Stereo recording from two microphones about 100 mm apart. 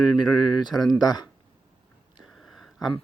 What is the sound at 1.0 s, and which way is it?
Speech, 45° left (ahead or behind).